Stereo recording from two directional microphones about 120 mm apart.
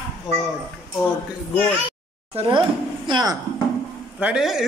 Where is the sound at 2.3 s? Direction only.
45° right (ahead or behind).